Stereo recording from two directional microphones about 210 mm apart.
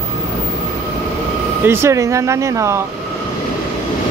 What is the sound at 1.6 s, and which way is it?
Speech, 15° right (ahead or behind).